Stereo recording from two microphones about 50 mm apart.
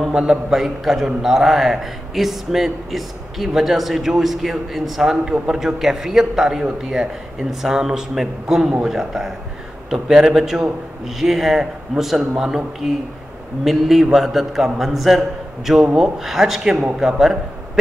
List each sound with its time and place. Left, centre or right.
0.1 s a man's voice: centre